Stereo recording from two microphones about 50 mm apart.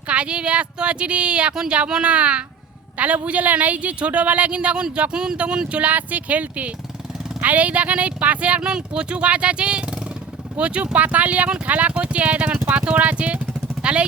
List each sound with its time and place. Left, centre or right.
0.1 s speech: right
5.8 s speech: right